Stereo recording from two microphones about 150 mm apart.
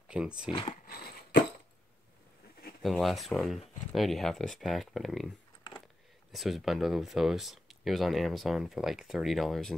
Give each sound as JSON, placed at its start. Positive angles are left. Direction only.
{"t": 0.1, "sound": "speech", "side_deg": -10}
{"t": 0.5, "sound": "speech", "side_deg": 35}
{"t": 2.8, "sound": "speech", "side_deg": 0}
{"t": 6.3, "sound": "speech", "side_deg": 0}